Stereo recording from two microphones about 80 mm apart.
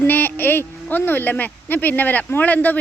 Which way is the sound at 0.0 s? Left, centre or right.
Left.